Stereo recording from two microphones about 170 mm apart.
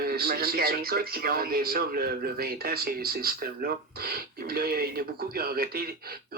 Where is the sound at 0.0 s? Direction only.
65° right (ahead or behind).